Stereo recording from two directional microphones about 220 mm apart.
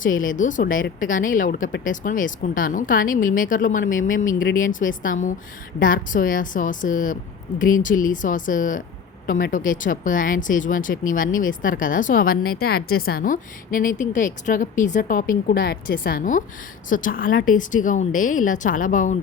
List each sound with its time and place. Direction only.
0.3 s a woman's voice: 35° left (ahead or behind)
4.4 s speech: 50° left (ahead or behind)
5.0 s a woman's voice: 35° left (ahead or behind)